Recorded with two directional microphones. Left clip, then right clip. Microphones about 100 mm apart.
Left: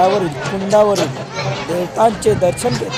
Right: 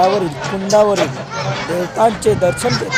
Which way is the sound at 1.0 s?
30° right (ahead or behind).